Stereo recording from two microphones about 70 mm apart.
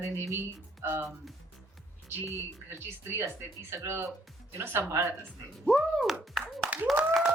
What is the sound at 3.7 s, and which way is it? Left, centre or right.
A woman's voice, right.